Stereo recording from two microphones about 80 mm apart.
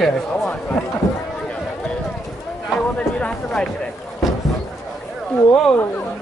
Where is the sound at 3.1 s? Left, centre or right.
Centre.